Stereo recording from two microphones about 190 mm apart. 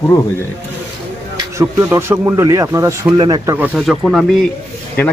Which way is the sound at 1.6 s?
10° right (ahead or behind).